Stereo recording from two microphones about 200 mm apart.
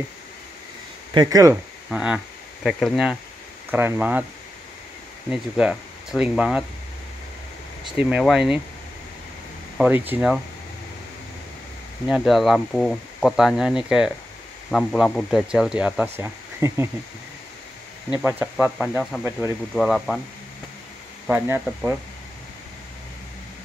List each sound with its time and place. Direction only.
1.1 s speech: 20° right (ahead or behind)
1.9 s speech: 5° right (ahead or behind)
5.3 s speech: 5° right (ahead or behind)
8.0 s speech: 5° right (ahead or behind)
9.8 s speech: 10° right (ahead or behind)
12.1 s speech: centre (ahead or behind)
18.1 s speech: 10° right (ahead or behind)
21.3 s speech: 5° right (ahead or behind)